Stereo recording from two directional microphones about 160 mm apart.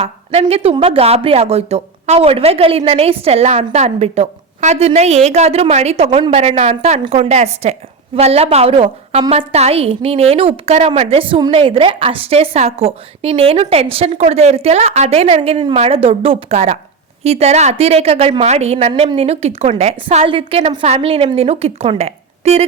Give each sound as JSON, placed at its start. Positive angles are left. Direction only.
{"t": 0.0, "sound": "speech", "side_deg": -40}